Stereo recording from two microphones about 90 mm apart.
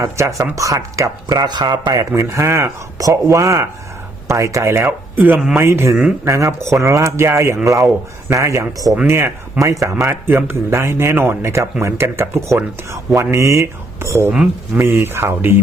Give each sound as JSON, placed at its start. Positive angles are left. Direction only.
{"t": 0.0, "sound": "speech", "side_deg": -35}
{"t": 4.9, "sound": "speech", "side_deg": -20}
{"t": 5.5, "sound": "speech", "side_deg": -30}